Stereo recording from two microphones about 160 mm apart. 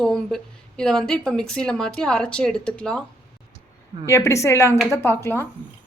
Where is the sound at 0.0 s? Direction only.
5° left (ahead or behind).